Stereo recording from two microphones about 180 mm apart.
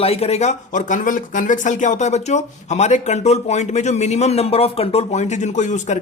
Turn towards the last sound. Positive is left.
turn(degrees=40)  # may be behind; listen again after turning